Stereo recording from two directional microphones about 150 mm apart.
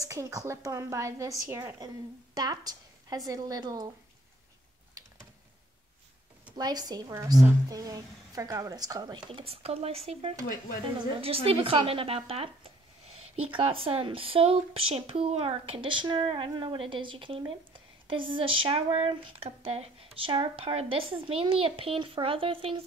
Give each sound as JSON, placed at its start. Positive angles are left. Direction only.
{"t": 0.0, "sound": "speech", "side_deg": -20}
{"t": 2.3, "sound": "a sound", "side_deg": -25}
{"t": 3.3, "sound": "speech", "side_deg": -25}
{"t": 6.5, "sound": "speech", "side_deg": -25}
{"t": 9.3, "sound": "speech", "side_deg": -40}